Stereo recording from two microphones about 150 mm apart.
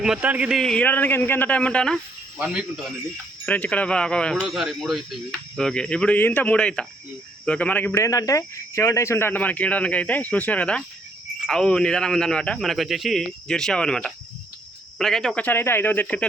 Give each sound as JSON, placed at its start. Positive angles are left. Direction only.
{"t": 0.0, "sound": "a man's voice", "side_deg": -5}
{"t": 0.6, "sound": "speech", "side_deg": 5}
{"t": 2.4, "sound": "a man's voice", "side_deg": -5}
{"t": 3.4, "sound": "a man's voice", "side_deg": 10}